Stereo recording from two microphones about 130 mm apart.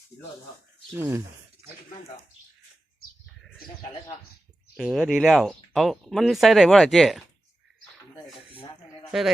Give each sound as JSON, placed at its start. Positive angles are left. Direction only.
{"t": 0.9, "sound": "speech", "side_deg": -15}
{"t": 4.8, "sound": "speech", "side_deg": 0}
{"t": 9.1, "sound": "speech", "side_deg": -5}